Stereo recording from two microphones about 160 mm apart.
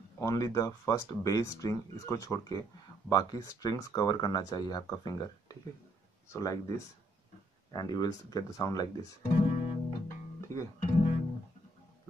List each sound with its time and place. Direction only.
0.2 s speech: 20° left (ahead or behind)
6.3 s speech: 20° left (ahead or behind)
7.7 s speech: 25° left (ahead or behind)
9.3 s guitar: 35° left (ahead or behind)
10.8 s music: 40° left (ahead or behind)